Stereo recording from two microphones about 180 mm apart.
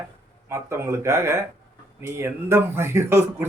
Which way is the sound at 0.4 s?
15° right (ahead or behind).